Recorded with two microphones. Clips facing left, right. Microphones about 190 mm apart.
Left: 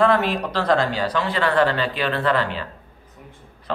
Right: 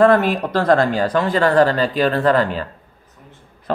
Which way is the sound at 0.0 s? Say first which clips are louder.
Right 5 dB; 50° right (ahead or behind).